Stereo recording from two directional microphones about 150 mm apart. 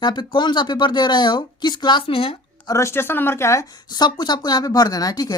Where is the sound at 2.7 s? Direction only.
15° left (ahead or behind).